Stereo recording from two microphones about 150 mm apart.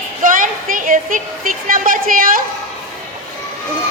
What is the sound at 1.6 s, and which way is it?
Speech, 65° right (ahead or behind).